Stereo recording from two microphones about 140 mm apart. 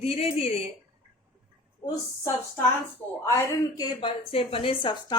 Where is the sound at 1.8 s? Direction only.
25° left (ahead or behind).